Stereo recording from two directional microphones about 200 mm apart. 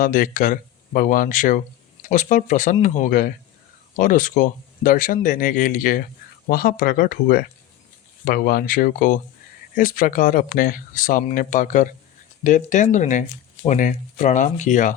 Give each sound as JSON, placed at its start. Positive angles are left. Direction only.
{"t": 0.0, "sound": "speech", "side_deg": 45}